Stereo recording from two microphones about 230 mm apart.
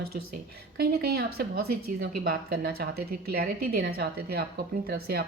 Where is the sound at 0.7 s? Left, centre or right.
Right.